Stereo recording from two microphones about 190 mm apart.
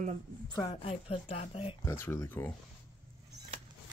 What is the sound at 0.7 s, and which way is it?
Speech, 30° left (ahead or behind).